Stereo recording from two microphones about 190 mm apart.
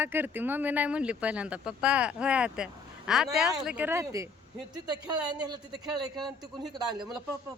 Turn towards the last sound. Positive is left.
turn(degrees=-20)  # may be behind; listen again after turning